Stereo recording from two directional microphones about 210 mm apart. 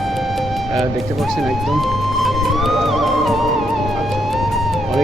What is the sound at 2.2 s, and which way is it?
Music, centre (ahead or behind).